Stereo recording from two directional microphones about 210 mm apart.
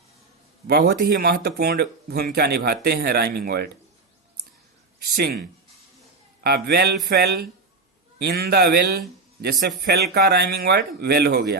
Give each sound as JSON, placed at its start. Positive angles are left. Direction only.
{"t": 0.7, "sound": "a man's voice", "side_deg": -50}
{"t": 5.0, "sound": "a man's voice", "side_deg": -45}